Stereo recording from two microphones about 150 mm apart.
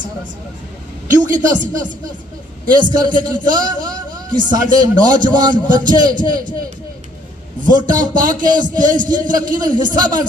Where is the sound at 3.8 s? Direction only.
30° right (ahead or behind).